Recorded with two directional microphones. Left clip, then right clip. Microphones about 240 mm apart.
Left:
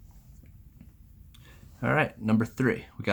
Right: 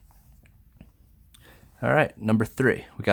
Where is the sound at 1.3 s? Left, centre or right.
Right.